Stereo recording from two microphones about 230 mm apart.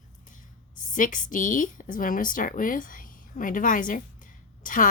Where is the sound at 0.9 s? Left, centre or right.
Left.